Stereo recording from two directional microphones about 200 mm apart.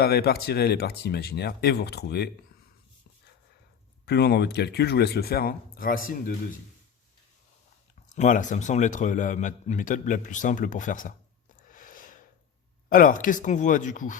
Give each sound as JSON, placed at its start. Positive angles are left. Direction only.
{"t": 0.0, "sound": "speech", "side_deg": 50}
{"t": 4.0, "sound": "speech", "side_deg": 55}
{"t": 8.1, "sound": "speech", "side_deg": 40}
{"t": 11.7, "sound": "a sound", "side_deg": 40}
{"t": 12.9, "sound": "speech", "side_deg": 45}